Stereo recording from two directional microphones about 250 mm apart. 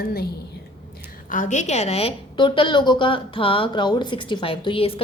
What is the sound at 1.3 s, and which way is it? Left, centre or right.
A woman's voice, left.